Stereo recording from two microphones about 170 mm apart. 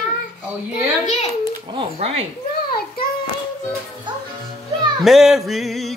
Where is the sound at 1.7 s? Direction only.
35° right (ahead or behind).